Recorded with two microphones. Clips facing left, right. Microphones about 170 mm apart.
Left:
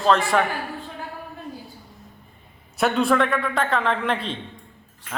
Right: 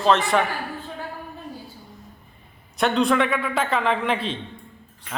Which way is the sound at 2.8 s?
5° left (ahead or behind).